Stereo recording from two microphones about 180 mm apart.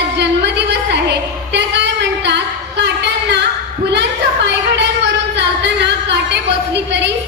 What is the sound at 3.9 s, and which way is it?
A woman's voice, 70° right (ahead or behind).